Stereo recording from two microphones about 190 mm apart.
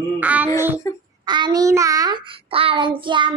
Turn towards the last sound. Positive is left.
turn(degrees=-25)  # may be behind; listen again after turning